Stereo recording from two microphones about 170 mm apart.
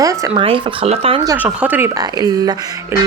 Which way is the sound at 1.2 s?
15° right (ahead or behind).